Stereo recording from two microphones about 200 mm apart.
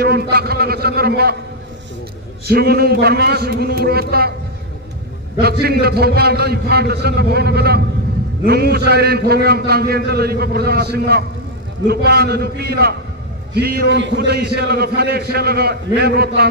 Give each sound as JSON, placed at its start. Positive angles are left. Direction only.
{"t": 0.0, "sound": "a sound", "side_deg": -55}
{"t": 2.4, "sound": "a man's voice", "side_deg": -50}
{"t": 5.4, "sound": "a man's voice", "side_deg": -50}